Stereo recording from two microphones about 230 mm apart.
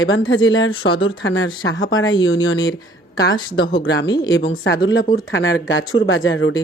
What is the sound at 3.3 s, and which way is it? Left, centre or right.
Speech, centre.